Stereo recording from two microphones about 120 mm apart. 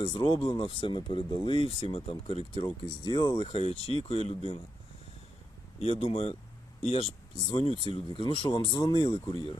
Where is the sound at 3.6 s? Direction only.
50° left (ahead or behind).